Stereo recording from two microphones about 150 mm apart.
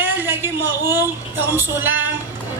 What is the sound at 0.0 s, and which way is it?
A woman's voice, 15° right (ahead or behind).